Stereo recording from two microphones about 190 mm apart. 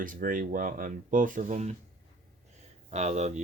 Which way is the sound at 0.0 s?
45° right (ahead or behind).